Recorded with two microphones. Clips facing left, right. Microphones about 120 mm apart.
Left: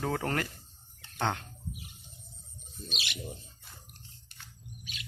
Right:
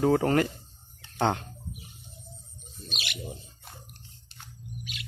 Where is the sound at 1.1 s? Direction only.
35° right (ahead or behind).